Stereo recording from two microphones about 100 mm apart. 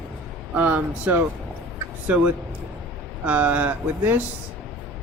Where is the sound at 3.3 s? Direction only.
15° right (ahead or behind).